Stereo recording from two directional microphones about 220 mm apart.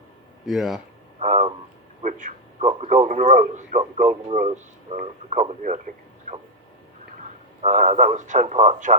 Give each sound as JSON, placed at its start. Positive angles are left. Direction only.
{"t": 0.4, "sound": "speech", "side_deg": 0}
{"t": 1.2, "sound": "a sound", "side_deg": -30}
{"t": 2.0, "sound": "a man's voice", "side_deg": -35}
{"t": 7.6, "sound": "a man's voice", "side_deg": -30}